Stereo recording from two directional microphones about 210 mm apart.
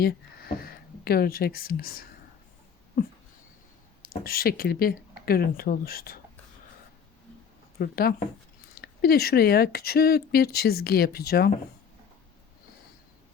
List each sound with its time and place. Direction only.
0.0 s speech: 45° left (ahead or behind)
4.1 s speech: 45° left (ahead or behind)
7.8 s speech: 45° left (ahead or behind)